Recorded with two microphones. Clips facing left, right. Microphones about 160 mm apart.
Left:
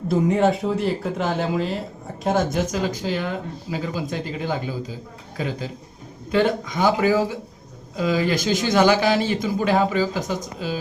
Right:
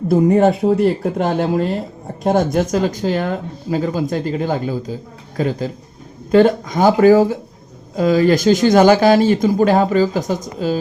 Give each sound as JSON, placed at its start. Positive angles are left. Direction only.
{"t": 0.1, "sound": "speech", "side_deg": -50}